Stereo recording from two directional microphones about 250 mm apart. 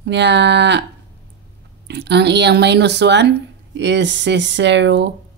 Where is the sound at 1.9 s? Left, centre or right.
Right.